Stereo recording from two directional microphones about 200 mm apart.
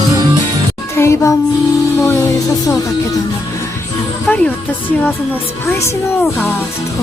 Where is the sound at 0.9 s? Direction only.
15° left (ahead or behind).